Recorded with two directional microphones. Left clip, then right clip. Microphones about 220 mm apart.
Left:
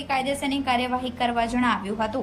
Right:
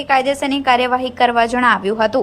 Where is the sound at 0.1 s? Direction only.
20° right (ahead or behind).